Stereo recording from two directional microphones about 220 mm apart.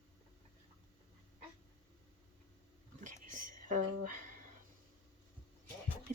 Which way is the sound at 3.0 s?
35° right (ahead or behind).